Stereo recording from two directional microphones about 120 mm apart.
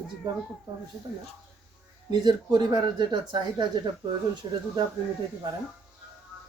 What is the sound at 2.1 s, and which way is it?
Speech, 35° right (ahead or behind).